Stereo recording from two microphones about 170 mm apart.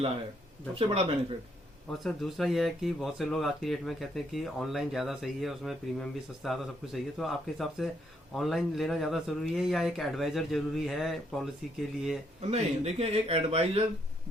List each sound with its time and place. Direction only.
0.8 s speech: 35° right (ahead or behind)
1.9 s speech: centre (ahead or behind)
12.4 s speech: 40° right (ahead or behind)